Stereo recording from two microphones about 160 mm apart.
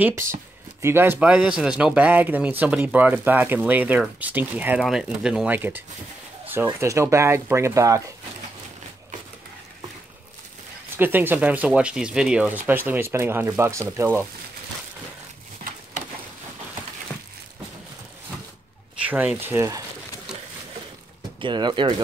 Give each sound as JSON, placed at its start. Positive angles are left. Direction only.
{"t": 0.0, "sound": "speech", "side_deg": -15}
{"t": 11.0, "sound": "speech", "side_deg": -10}
{"t": 18.9, "sound": "speech", "side_deg": -10}
{"t": 21.4, "sound": "speech", "side_deg": -30}